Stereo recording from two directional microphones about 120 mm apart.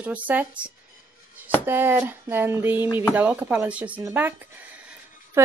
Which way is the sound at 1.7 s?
20° right (ahead or behind).